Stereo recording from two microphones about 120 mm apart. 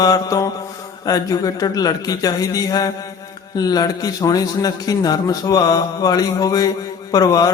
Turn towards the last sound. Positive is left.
turn(degrees=30)  # may be behind; listen again after turning